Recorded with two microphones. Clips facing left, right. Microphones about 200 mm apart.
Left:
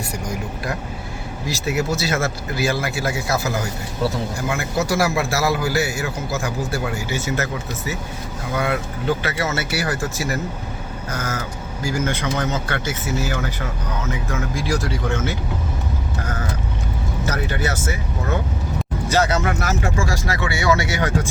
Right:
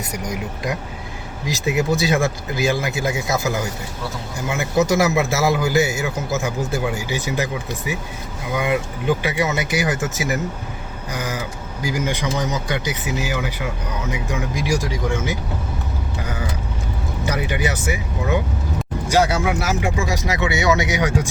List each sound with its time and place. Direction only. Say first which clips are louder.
0.3 s a man's voice: right 2 dB; 15° right (ahead or behind)
17.2 s a man's voice: right 2 dB; 15° right (ahead or behind)